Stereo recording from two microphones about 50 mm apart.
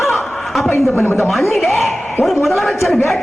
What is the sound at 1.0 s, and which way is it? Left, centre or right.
Speech, left.